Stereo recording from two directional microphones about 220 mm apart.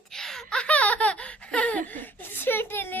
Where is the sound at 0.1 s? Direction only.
Centre (ahead or behind).